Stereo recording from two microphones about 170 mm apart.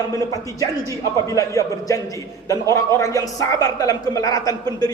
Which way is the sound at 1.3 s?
20° left (ahead or behind).